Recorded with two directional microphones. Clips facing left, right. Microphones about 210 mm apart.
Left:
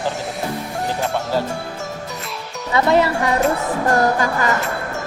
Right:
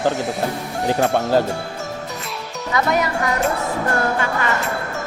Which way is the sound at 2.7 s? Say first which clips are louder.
Left 4 dB; 30° left (ahead or behind).